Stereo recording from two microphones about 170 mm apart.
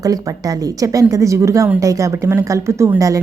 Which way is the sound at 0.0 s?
20° right (ahead or behind).